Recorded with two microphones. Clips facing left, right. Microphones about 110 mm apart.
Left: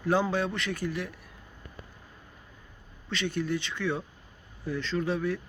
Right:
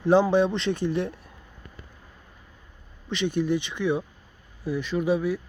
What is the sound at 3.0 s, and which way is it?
Speech, 20° right (ahead or behind).